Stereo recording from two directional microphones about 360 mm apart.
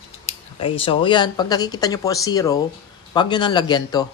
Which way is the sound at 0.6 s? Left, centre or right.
Centre.